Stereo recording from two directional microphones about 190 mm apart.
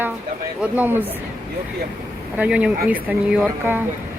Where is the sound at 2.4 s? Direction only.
5° right (ahead or behind).